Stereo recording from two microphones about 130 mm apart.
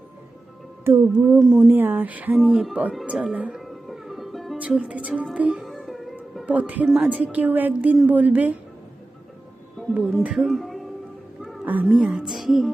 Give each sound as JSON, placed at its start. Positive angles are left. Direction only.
{"t": 1.1, "sound": "speech", "side_deg": -15}
{"t": 1.4, "sound": "speech", "side_deg": -5}
{"t": 1.6, "sound": "speech", "side_deg": -15}
{"t": 3.6, "sound": "music", "side_deg": 0}
{"t": 4.5, "sound": "speech", "side_deg": -10}
{"t": 6.4, "sound": "speech", "side_deg": -10}
{"t": 9.9, "sound": "speech", "side_deg": -5}
{"t": 11.6, "sound": "speech", "side_deg": -15}